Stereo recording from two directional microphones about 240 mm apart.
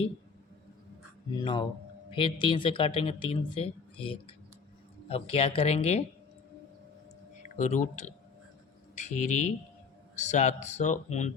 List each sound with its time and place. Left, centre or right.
1.4 s speech: centre
7.4 s speech: left